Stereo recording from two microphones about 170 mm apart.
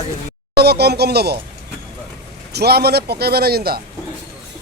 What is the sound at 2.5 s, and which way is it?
A man's voice, 70° right (ahead or behind).